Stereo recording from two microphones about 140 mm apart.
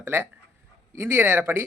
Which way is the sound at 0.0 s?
20° right (ahead or behind).